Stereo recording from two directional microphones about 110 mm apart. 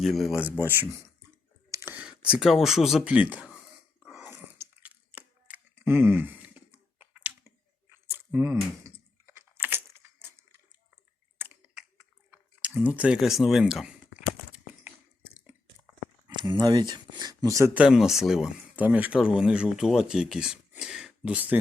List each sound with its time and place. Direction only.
0.0 s speech: centre (ahead or behind)
0.5 s speech: 20° right (ahead or behind)
1.7 s a sound: 20° right (ahead or behind)
2.0 s speech: 10° right (ahead or behind)
4.8 s a sound: 15° right (ahead or behind)
12.3 s speech: 15° right (ahead or behind)
14.5 s a sound: 15° right (ahead or behind)
16.3 s speech: 40° right (ahead or behind)
17.7 s speech: 5° right (ahead or behind)